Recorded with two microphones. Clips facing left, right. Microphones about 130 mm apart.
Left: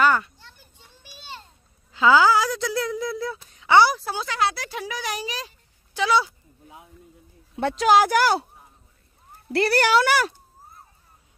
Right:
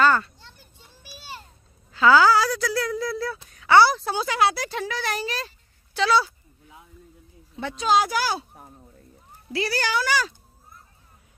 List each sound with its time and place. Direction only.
0.0 s children playing: 15° left (ahead or behind)
1.9 s speech: 15° left (ahead or behind)
4.0 s speech: centre (ahead or behind)
4.6 s speech: 10° left (ahead or behind)
7.5 s speech: 70° left (ahead or behind)
9.5 s speech: 60° left (ahead or behind)